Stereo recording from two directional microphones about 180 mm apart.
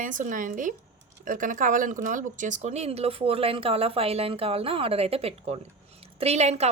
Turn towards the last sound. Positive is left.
turn(degrees=-35)  # may be behind; listen again after turning